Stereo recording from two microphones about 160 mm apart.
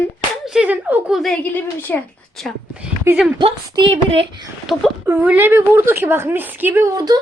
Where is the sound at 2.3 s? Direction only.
5° right (ahead or behind).